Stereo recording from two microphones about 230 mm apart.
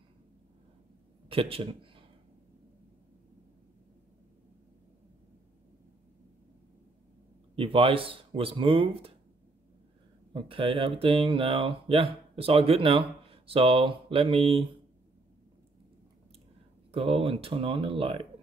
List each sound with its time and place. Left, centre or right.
1.3 s a man's voice: right
7.5 s speech: right
10.3 s speech: right
16.9 s speech: right